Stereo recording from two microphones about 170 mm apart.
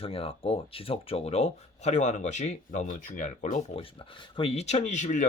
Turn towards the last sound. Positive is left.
turn(degrees=45)  # may be behind; listen again after turning